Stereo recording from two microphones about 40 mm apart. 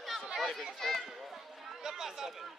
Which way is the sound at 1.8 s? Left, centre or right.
Centre.